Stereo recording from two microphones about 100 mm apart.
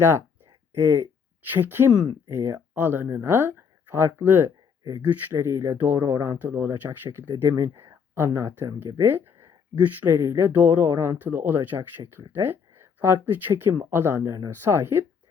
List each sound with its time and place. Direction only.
0.7 s speech: 25° right (ahead or behind)
4.8 s speech: 35° right (ahead or behind)
6.1 s speech: 35° right (ahead or behind)
6.5 s speech: 20° right (ahead or behind)